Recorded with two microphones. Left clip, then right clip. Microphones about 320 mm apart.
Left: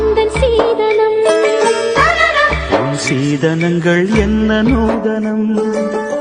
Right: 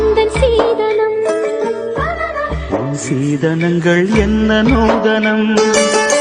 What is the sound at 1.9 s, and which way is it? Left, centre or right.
Music, left.